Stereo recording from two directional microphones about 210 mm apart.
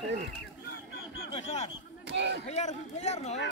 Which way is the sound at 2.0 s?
55° right (ahead or behind).